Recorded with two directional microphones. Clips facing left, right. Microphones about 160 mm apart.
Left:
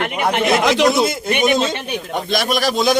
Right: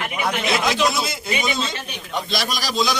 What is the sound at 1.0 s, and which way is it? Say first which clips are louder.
A man's voice: left 8 dB; 60° left (ahead or behind).